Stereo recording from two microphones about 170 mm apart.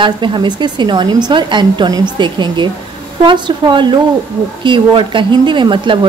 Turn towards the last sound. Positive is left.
turn(degrees=-30)  # may be behind; listen again after turning